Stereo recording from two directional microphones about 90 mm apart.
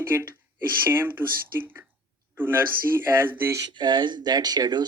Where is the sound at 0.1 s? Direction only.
30° right (ahead or behind).